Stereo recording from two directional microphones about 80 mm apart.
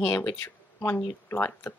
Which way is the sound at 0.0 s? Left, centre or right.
Left.